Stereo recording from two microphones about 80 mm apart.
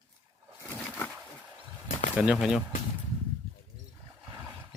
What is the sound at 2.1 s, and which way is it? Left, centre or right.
Speech, centre.